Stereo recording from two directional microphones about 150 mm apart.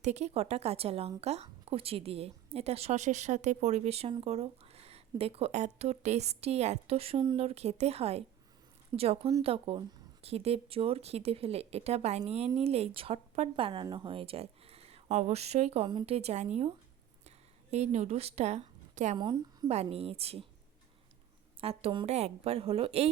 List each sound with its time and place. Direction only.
0.0 s a woman's voice: 50° right (ahead or behind)
15.9 s a woman's voice: 30° right (ahead or behind)
16.1 s speech: 45° right (ahead or behind)
17.2 s a sound: 45° right (ahead or behind)
19.1 s a woman's voice: 30° right (ahead or behind)
19.7 s a woman's voice: 45° right (ahead or behind)
21.6 s a woman's voice: 40° right (ahead or behind)